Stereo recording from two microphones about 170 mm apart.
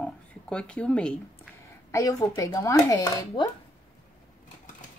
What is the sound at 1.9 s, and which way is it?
Speech, 20° left (ahead or behind).